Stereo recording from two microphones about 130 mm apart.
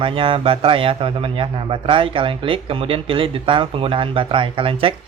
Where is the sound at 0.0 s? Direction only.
45° right (ahead or behind).